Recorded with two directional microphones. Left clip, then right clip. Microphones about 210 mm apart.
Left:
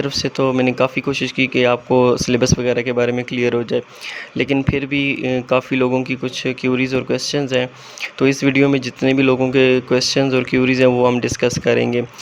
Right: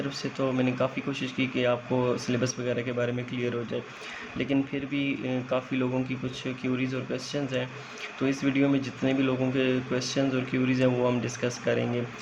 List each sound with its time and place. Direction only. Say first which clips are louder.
0.0 s speech: left 12 dB; 50° left (ahead or behind)